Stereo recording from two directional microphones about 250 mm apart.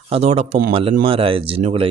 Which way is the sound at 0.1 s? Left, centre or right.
Right.